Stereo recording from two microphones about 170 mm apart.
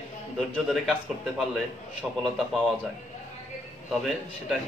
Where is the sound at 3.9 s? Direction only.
Centre (ahead or behind).